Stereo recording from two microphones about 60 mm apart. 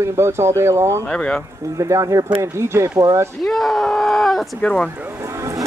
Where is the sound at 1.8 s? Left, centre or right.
Right.